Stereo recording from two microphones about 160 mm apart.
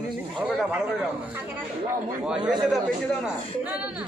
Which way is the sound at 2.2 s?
5° right (ahead or behind).